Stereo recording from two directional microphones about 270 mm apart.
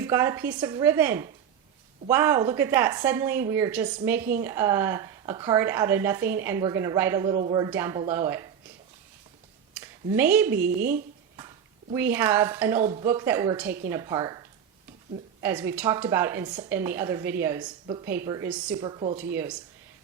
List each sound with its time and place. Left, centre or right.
0.0 s a woman's voice: centre
9.7 s a sound: centre
10.5 s a woman's voice: right
11.3 s a woman's voice: centre
18.8 s a woman's voice: centre